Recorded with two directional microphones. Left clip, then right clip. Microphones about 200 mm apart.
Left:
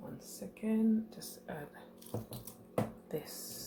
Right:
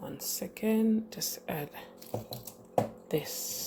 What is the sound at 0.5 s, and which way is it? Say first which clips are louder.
Speech: right 5 dB; 50° right (ahead or behind).